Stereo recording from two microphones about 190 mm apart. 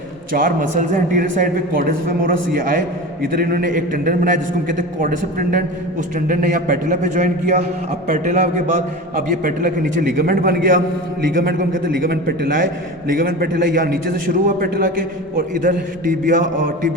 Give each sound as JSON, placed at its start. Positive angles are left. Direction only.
{"t": 0.3, "sound": "a man's voice", "side_deg": -45}